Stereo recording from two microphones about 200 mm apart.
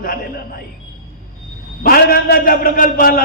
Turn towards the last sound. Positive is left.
turn(degrees=45)  # may be behind; listen again after turning